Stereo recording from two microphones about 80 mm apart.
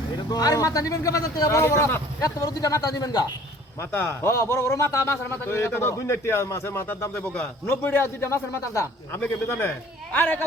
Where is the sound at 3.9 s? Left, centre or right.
Left.